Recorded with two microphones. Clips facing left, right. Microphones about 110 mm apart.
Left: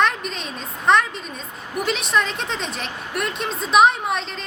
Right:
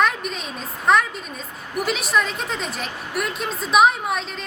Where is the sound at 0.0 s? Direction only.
5° right (ahead or behind).